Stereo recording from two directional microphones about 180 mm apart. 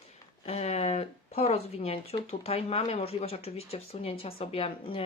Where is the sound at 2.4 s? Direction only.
35° left (ahead or behind).